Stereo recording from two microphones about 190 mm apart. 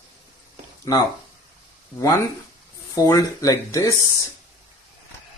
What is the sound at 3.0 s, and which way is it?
Speech, 20° left (ahead or behind).